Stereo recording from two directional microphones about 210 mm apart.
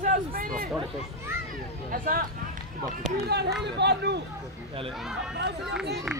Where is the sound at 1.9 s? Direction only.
40° right (ahead or behind).